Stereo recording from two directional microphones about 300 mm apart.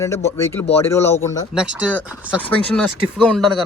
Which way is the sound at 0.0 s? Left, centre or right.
Centre.